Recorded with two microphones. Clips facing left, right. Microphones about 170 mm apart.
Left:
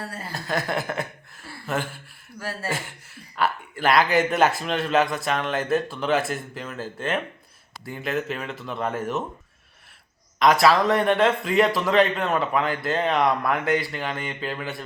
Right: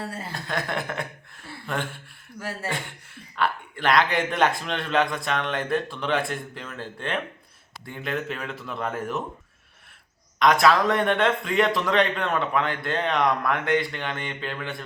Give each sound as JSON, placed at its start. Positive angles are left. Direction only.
{"t": 0.0, "sound": "speech", "side_deg": -25}
{"t": 0.3, "sound": "speech", "side_deg": 0}
{"t": 2.4, "sound": "speech", "side_deg": -20}
{"t": 2.6, "sound": "speech", "side_deg": 5}
{"t": 10.4, "sound": "speech", "side_deg": 0}